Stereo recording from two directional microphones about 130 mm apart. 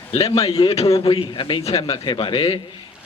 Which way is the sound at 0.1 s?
50° left (ahead or behind).